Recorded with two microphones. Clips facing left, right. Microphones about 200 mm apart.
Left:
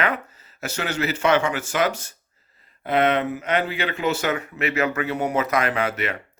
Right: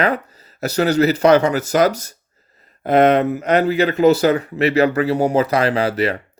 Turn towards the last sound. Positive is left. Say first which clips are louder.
# right 7 dB
turn(degrees=-35)  # may be behind; listen again after turning